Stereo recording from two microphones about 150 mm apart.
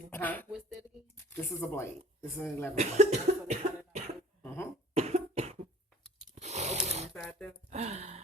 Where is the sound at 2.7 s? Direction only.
50° right (ahead or behind).